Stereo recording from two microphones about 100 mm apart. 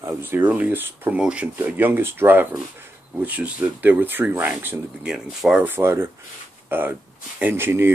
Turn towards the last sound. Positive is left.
turn(degrees=-25)  # may be behind; listen again after turning